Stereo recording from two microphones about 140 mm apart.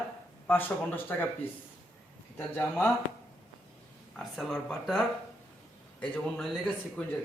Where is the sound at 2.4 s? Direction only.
15° left (ahead or behind).